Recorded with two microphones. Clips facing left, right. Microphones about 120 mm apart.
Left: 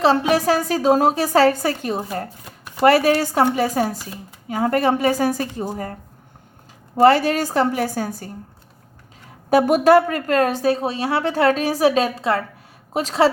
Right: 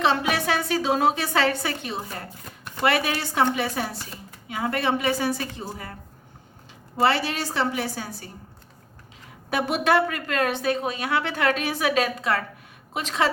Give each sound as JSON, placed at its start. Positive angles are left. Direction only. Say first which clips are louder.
{"t": 0.0, "sound": "a woman's voice", "louder": "left 6 dB", "side_deg": 35}
{"t": 7.0, "sound": "a woman's voice", "louder": "left 8 dB", "side_deg": 45}
{"t": 9.5, "sound": "a woman's voice", "louder": "left 9 dB", "side_deg": 40}